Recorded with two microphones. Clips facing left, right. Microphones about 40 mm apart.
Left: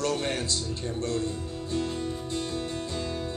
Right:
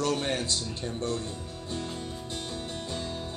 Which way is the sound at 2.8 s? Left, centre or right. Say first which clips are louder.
Left 2 dB; right.